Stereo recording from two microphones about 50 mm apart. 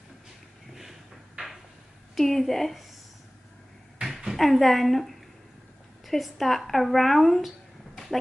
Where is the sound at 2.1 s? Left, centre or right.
Centre.